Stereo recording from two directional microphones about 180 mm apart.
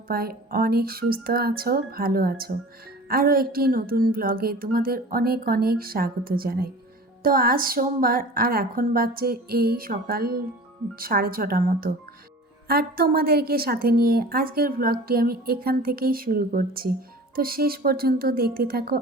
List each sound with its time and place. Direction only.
0.1 s speech: 55° right (ahead or behind)